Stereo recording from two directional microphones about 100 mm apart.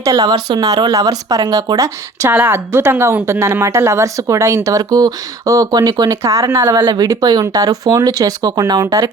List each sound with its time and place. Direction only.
0.0 s speech: 45° right (ahead or behind)
2.3 s a woman's voice: 20° right (ahead or behind)
6.7 s speech: 45° right (ahead or behind)